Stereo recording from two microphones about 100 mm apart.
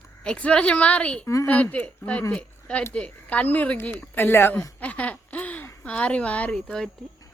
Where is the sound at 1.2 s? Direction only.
30° left (ahead or behind).